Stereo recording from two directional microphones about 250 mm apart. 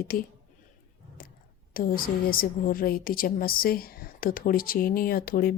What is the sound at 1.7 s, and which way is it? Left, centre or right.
A woman's voice, left.